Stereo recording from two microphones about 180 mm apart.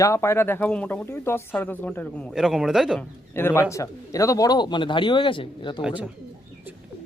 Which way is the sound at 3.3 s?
10° left (ahead or behind).